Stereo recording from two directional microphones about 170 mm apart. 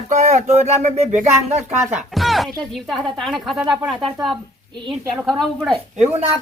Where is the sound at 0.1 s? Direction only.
45° right (ahead or behind).